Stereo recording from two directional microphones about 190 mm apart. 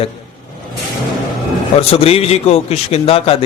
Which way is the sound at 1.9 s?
30° left (ahead or behind).